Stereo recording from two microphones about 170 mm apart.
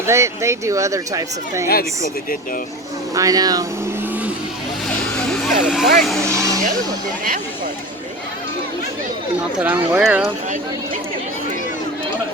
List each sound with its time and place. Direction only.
0.0 s speech: 15° right (ahead or behind)
1.6 s speech: 60° left (ahead or behind)
3.2 s speech: 20° right (ahead or behind)
5.1 s vehicle: 5° left (ahead or behind)
6.0 s speech: centre (ahead or behind)
6.2 s vehicle: 20° right (ahead or behind)
9.6 s speech: 10° right (ahead or behind)